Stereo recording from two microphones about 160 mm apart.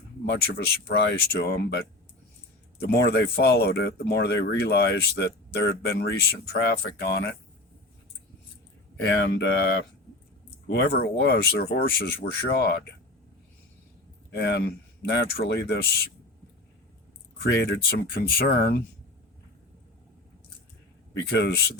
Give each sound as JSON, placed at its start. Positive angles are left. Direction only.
{"t": 0.3, "sound": "speech", "side_deg": 85}
{"t": 2.8, "sound": "speech", "side_deg": 90}
{"t": 9.2, "sound": "speech", "side_deg": 90}
{"t": 14.3, "sound": "speech", "side_deg": 90}
{"t": 17.5, "sound": "speech", "side_deg": 90}
{"t": 21.2, "sound": "speech", "side_deg": 90}